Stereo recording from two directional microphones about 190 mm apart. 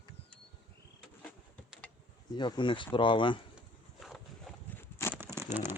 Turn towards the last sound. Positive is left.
turn(degrees=-10)  # may be behind; listen again after turning